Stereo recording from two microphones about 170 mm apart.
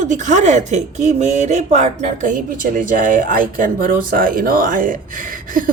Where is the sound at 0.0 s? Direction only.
45° right (ahead or behind).